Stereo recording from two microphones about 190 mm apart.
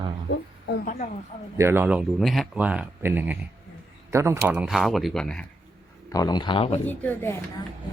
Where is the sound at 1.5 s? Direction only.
15° right (ahead or behind); by 5.5 s 5° left (ahead or behind).